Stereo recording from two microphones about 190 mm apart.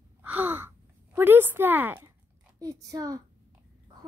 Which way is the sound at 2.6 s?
20° right (ahead or behind).